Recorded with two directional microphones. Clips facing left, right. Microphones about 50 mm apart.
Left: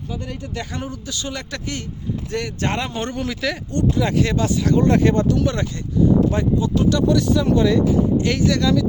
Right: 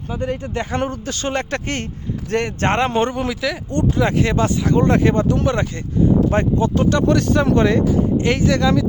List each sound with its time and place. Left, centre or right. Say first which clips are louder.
0.1 s speech: right 7 dB; right
0.8 s a man's voice: right 6 dB; right
3.2 s speech: right 2 dB; centre
3.7 s speech: right 2 dB; right
6.3 s speech: right 2 dB; right